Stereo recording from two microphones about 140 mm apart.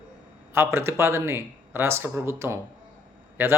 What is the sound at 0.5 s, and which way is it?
Speech, 15° right (ahead or behind).